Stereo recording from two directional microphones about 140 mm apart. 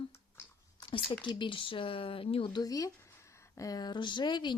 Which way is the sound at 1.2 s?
35° left (ahead or behind).